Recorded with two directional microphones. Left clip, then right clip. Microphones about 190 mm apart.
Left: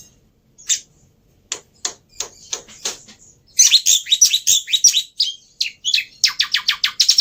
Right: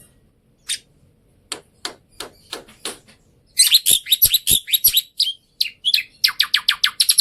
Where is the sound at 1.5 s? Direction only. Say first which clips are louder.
Left 3 dB; 15° right (ahead or behind).